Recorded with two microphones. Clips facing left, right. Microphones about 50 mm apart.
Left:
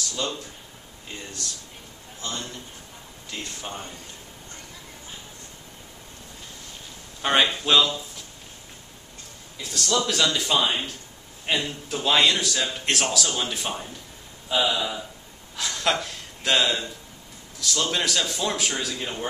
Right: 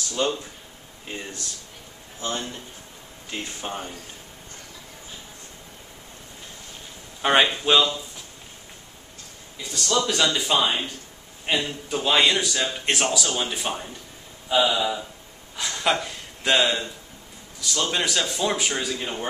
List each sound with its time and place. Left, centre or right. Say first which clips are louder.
0.1 s speech: right 8 dB; right
3.3 s speech: right 3 dB; right
7.2 s speech: right 2 dB; centre
9.6 s a man's voice: right 1 dB; centre
15.5 s gasp: right 1 dB; centre
17.6 s a man's voice: even; centre